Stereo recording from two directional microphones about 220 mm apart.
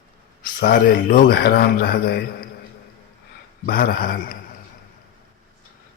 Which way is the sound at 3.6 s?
45° left (ahead or behind).